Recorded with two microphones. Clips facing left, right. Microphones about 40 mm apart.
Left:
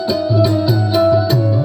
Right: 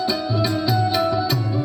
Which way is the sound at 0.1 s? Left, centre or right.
Centre.